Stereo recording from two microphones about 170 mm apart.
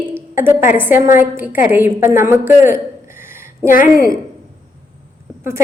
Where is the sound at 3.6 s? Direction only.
50° left (ahead or behind).